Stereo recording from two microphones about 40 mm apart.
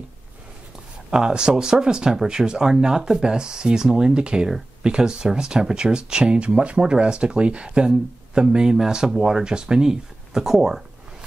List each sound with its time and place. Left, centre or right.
1.1 s speech: centre